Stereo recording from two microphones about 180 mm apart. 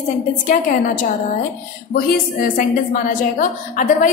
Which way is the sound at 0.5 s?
45° left (ahead or behind).